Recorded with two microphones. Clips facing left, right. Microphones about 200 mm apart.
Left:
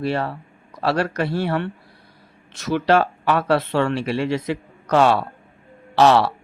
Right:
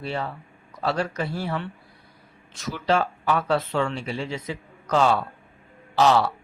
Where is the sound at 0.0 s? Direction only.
70° left (ahead or behind).